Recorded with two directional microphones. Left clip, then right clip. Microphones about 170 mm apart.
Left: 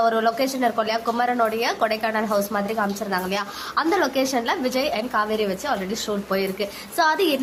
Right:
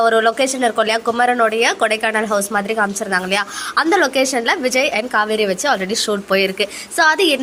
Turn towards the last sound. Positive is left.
turn(degrees=-20)  # may be behind; listen again after turning